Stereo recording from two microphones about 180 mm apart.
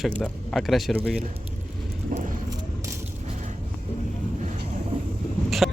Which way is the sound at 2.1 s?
50° right (ahead or behind).